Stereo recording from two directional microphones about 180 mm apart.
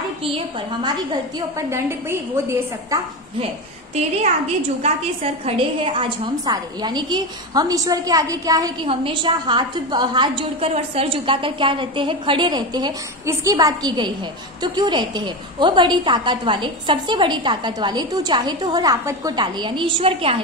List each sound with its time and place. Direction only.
1.7 s a woman's voice: 15° right (ahead or behind)
5.4 s a woman's voice: 30° right (ahead or behind)